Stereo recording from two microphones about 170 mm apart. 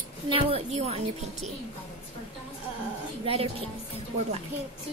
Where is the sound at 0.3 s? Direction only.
35° right (ahead or behind).